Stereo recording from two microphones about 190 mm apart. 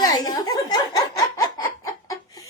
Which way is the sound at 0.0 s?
20° left (ahead or behind).